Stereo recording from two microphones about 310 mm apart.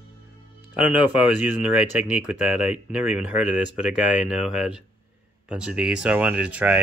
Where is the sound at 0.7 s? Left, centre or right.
Centre.